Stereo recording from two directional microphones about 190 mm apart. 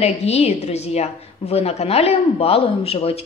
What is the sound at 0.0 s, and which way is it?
A woman's voice, 35° left (ahead or behind).